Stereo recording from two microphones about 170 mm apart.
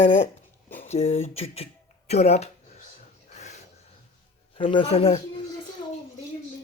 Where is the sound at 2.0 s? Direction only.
40° left (ahead or behind).